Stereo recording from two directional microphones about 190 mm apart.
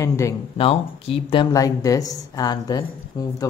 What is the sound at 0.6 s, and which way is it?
Speech, 30° left (ahead or behind).